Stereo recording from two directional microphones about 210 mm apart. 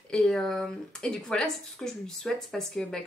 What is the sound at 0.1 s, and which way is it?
Speech, centre (ahead or behind).